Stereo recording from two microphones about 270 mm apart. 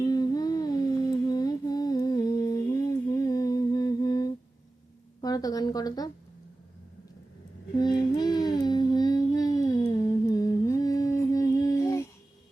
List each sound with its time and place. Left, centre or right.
0.0 s humming: centre
5.2 s a woman's voice: centre
7.8 s music: centre